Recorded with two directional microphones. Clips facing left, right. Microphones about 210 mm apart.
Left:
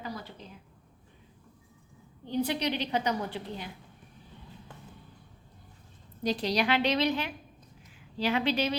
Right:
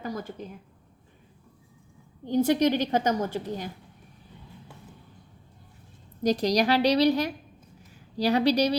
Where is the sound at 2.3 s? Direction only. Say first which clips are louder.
Right 8 dB; 45° right (ahead or behind).